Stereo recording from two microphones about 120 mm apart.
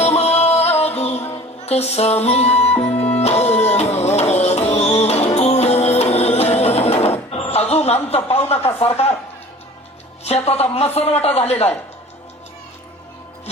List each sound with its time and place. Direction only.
0.0 s music: 60° left (ahead or behind)
1.6 s a woman's voice: 60° left (ahead or behind)
2.2 s music: 60° left (ahead or behind)
8.1 s a woman's voice: 60° left (ahead or behind)
10.2 s a woman's voice: 60° left (ahead or behind)